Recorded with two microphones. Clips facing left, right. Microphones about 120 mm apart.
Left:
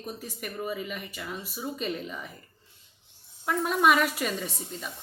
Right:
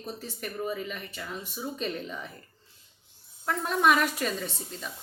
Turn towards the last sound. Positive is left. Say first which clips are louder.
# left 1 dB
turn(degrees=5)  # may be behind; listen again after turning